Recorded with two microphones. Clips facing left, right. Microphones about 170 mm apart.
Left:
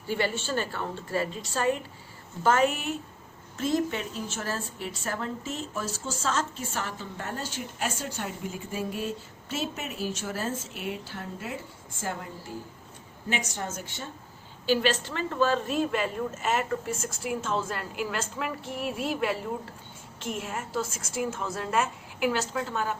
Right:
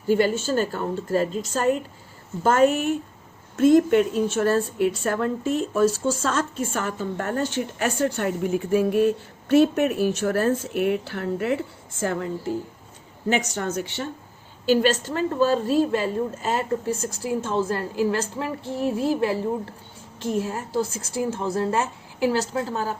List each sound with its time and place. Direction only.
0.1 s a woman's voice: 45° right (ahead or behind)
3.7 s a woman's voice: 55° right (ahead or behind); by 12.3 s 80° right
13.5 s speech: 70° right (ahead or behind)
14.7 s a woman's voice: 45° right (ahead or behind)